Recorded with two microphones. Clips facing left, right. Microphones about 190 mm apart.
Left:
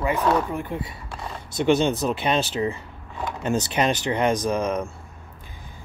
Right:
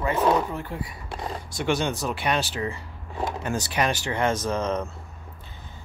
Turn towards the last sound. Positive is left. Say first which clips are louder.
# left 2 dB
turn(degrees=10)  # may be behind; listen again after turning